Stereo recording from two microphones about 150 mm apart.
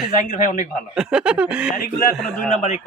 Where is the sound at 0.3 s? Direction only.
55° left (ahead or behind).